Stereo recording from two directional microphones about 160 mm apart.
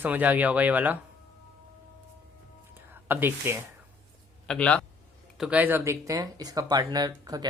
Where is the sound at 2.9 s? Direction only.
15° right (ahead or behind).